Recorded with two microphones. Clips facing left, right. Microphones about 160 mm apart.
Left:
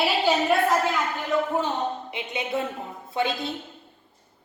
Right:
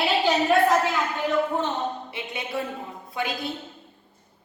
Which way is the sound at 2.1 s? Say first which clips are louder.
Left 2 dB; 20° left (ahead or behind).